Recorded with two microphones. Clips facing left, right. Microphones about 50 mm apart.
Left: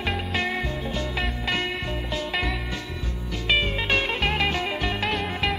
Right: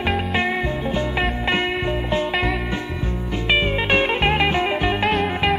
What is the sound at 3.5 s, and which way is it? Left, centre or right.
Music, right.